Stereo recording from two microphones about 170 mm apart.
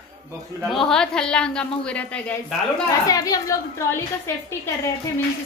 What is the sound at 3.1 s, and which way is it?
Speech, 20° left (ahead or behind).